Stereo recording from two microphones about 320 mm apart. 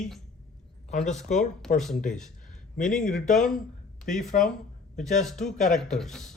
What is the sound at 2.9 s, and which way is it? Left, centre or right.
Speech, centre.